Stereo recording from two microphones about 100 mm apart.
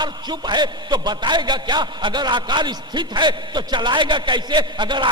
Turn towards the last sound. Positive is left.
turn(degrees=-50)  # may be behind; listen again after turning